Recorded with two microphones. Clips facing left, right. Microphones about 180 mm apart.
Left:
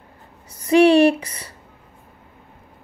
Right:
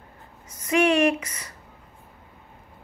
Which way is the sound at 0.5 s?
35° left (ahead or behind).